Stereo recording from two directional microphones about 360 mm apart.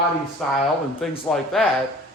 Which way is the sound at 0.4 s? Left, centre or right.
Centre.